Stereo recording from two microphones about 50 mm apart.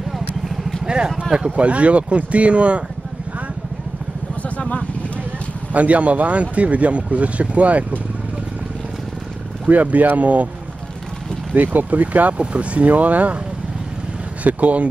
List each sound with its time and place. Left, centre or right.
0.8 s speech: centre
1.7 s speech: right
4.4 s vehicle: left
5.7 s speech: right
9.7 s speech: right
11.5 s speech: right
14.4 s speech: right